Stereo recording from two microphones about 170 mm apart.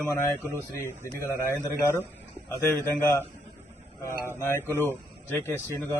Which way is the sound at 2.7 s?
15° left (ahead or behind).